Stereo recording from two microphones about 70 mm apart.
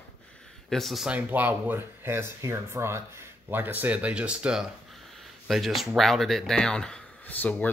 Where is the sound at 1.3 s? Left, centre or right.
Right.